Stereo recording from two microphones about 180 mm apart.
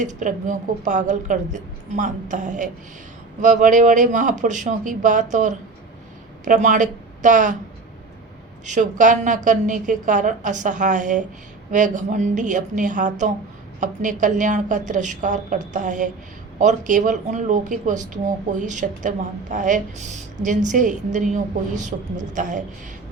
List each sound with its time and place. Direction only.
0.0 s a woman's voice: 45° right (ahead or behind)
8.6 s a woman's voice: 45° right (ahead or behind)